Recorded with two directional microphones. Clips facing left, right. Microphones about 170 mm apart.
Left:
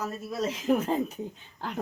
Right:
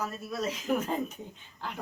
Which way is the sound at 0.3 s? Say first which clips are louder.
Left 5 dB; 25° left (ahead or behind).